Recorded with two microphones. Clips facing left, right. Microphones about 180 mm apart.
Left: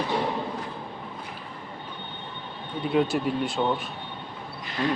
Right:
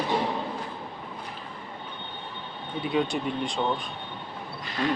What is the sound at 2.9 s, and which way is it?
Speech, 5° left (ahead or behind).